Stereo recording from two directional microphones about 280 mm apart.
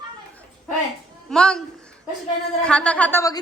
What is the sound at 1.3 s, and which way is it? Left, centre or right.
A woman's voice, centre.